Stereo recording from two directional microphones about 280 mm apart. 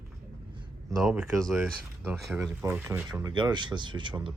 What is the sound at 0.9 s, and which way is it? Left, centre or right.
Speech, centre.